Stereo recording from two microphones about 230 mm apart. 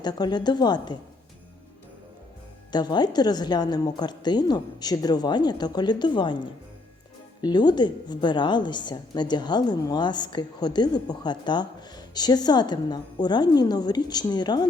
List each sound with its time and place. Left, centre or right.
0.0 s a woman's voice: centre
2.7 s a woman's voice: centre